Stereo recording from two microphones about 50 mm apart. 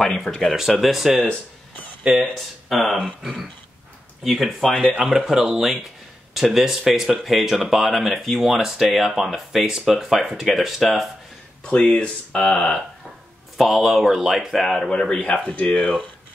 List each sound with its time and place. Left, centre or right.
0.0 s speech: centre
0.5 s speech: centre
2.7 s speech: centre
11.6 s speech: centre
13.6 s speech: centre
14.9 s speech: centre